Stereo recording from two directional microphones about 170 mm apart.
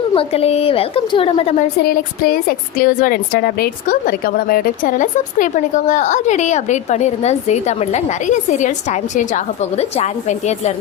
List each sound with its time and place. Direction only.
0.1 s a woman's voice: 35° left (ahead or behind)
1.8 s a woman's voice: 60° left (ahead or behind); by 10.5 s 40° left (ahead or behind)